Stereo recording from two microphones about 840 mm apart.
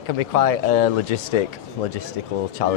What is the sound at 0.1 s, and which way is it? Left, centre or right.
Speech, left.